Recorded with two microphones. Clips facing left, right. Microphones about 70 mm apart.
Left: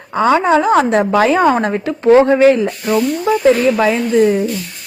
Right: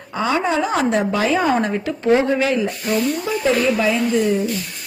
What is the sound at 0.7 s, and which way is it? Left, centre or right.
A woman's voice, left.